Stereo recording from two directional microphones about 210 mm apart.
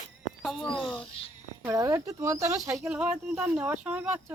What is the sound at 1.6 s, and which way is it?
Speech, 15° right (ahead or behind).